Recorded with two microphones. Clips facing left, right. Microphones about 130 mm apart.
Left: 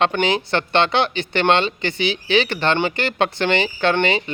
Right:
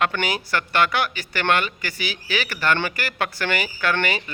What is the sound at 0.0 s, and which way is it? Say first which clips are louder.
Speech: left 5 dB; 25° left (ahead or behind).